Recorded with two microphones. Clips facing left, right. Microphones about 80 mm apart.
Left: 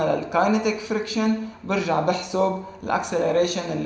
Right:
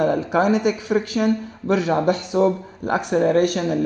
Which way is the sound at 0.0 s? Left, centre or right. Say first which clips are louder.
Right 2 dB; right.